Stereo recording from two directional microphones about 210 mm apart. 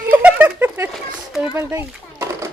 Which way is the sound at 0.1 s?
5° right (ahead or behind).